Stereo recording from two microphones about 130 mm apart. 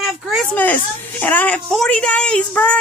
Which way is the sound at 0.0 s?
Centre (ahead or behind).